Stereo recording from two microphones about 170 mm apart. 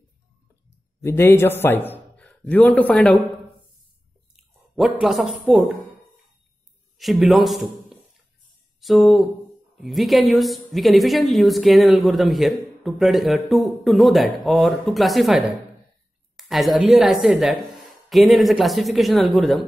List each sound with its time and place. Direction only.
1.0 s a man's voice: 15° left (ahead or behind)
5.0 s a woman's voice: 5° right (ahead or behind)
7.0 s a man's voice: centre (ahead or behind)